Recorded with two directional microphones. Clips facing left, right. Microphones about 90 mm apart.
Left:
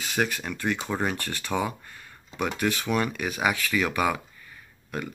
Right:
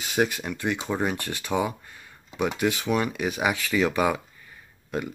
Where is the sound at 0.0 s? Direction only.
20° right (ahead or behind).